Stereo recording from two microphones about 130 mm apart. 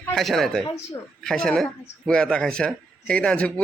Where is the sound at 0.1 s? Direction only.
Centre (ahead or behind).